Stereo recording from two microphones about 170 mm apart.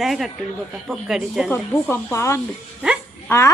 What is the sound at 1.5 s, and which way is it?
A woman's voice, 15° left (ahead or behind).